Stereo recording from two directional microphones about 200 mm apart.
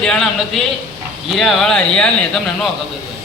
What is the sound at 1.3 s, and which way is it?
Speech, centre (ahead or behind).